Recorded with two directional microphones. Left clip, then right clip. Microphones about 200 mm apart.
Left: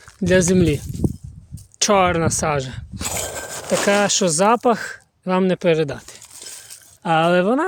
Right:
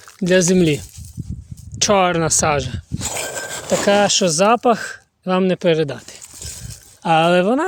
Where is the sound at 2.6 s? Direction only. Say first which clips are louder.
Right 2 dB; centre (ahead or behind).